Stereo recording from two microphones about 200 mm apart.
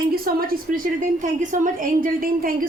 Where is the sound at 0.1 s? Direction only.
45° right (ahead or behind).